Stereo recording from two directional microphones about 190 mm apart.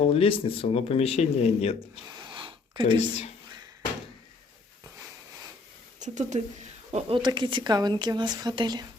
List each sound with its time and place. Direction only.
0.0 s speech: 30° left (ahead or behind)
2.2 s a sound: 25° right (ahead or behind)
6.0 s speech: 40° right (ahead or behind)
7.2 s speech: 25° right (ahead or behind)